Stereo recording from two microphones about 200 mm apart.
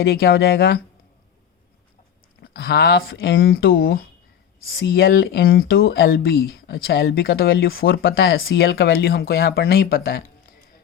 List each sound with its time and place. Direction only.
0.0 s speech: 50° left (ahead or behind)
2.4 s speech: 50° left (ahead or behind)